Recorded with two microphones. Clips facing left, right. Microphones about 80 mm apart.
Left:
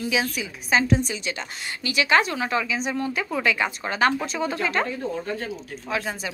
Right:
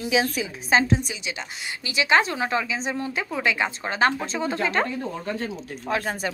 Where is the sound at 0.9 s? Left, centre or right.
Centre.